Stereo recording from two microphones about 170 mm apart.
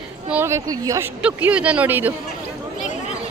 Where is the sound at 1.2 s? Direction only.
10° right (ahead or behind).